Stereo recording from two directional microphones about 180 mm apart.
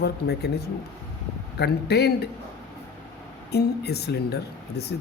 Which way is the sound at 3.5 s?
65° left (ahead or behind).